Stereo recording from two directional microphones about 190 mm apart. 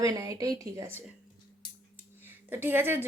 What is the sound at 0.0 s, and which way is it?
Speech, 20° right (ahead or behind).